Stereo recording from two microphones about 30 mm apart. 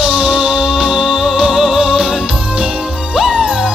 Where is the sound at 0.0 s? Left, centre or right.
Right.